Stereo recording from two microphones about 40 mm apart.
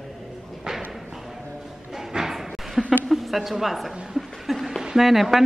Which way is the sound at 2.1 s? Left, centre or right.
Centre.